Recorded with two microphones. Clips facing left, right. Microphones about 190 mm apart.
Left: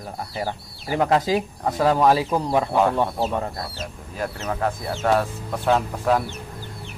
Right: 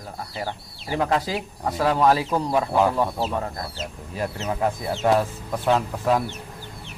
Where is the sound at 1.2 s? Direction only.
20° left (ahead or behind).